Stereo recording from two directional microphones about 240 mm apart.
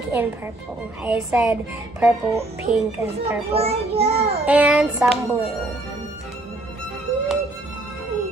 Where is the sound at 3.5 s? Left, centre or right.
Right.